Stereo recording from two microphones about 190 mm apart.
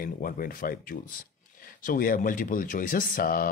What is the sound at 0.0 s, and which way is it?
Speech, 50° left (ahead or behind).